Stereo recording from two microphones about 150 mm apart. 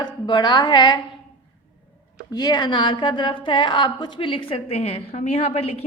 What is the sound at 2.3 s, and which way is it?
A woman's voice, 25° left (ahead or behind).